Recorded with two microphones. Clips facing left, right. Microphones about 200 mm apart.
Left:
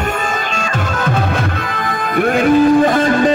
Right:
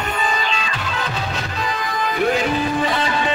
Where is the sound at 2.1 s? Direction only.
55° left (ahead or behind).